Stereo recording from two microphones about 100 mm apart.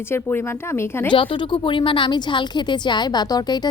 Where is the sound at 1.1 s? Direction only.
55° left (ahead or behind).